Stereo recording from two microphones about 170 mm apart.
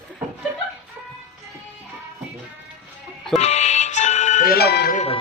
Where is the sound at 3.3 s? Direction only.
40° left (ahead or behind); by 5.0 s 75° left (ahead or behind).